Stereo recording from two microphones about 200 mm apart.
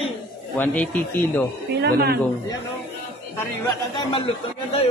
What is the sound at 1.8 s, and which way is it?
Speech, 50° right (ahead or behind).